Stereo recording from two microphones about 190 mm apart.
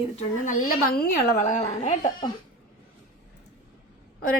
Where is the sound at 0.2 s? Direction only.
45° left (ahead or behind).